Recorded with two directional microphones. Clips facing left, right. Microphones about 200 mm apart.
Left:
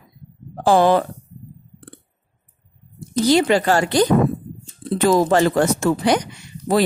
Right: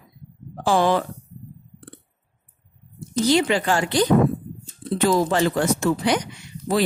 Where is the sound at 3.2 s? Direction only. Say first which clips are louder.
Left 3 dB; 40° left (ahead or behind).